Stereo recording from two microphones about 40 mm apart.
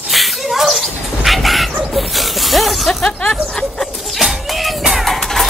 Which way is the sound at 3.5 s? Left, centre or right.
Centre.